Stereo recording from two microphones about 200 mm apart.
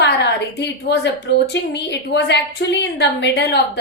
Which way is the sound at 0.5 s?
60° left (ahead or behind).